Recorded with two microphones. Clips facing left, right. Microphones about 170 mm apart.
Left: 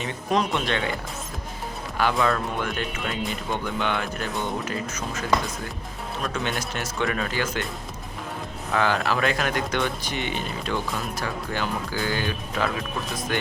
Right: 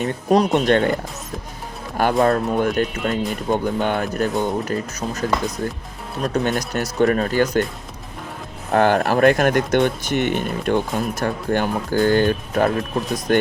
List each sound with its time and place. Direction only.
0.0 s speech: 40° right (ahead or behind)
2.0 s speech: 45° right (ahead or behind)
6.2 s speech: 40° right (ahead or behind)
8.7 s speech: 50° right (ahead or behind)